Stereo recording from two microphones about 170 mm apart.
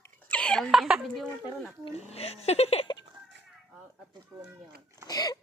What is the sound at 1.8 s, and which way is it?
Speech, 35° left (ahead or behind).